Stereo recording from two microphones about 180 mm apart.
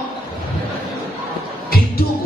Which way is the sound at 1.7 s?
55° left (ahead or behind).